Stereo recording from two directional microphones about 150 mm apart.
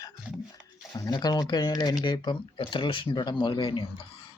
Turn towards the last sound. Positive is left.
turn(degrees=35)  # may be behind; listen again after turning